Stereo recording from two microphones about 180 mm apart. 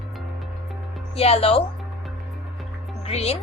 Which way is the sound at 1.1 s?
35° left (ahead or behind).